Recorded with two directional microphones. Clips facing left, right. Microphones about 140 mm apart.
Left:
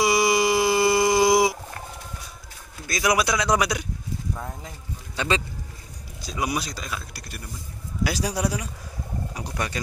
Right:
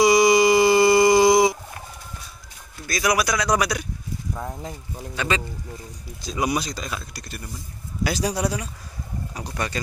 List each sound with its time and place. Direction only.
0.0 s a sound: 5° left (ahead or behind)
2.9 s speech: 20° left (ahead or behind)
5.1 s speech: 25° left (ahead or behind)
6.3 s a man's voice: 5° left (ahead or behind)